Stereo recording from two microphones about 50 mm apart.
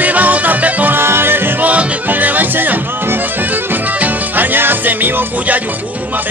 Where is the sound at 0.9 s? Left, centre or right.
Right.